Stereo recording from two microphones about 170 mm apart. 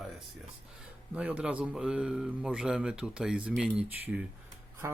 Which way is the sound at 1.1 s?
5° right (ahead or behind).